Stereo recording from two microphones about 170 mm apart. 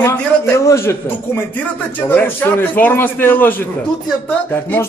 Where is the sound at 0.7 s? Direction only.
15° left (ahead or behind).